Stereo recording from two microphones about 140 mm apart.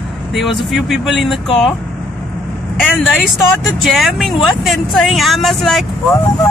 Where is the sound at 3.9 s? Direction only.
Centre (ahead or behind).